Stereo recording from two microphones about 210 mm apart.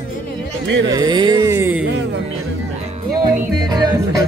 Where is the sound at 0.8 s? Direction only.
20° right (ahead or behind).